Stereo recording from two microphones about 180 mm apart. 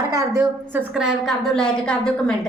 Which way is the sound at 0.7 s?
5° right (ahead or behind).